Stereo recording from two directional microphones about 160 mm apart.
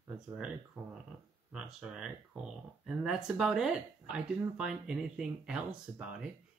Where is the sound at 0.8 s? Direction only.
Centre (ahead or behind).